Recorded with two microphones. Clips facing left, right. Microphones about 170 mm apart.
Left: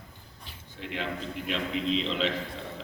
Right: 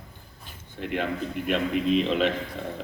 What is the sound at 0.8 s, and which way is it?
A man's voice, 55° right (ahead or behind).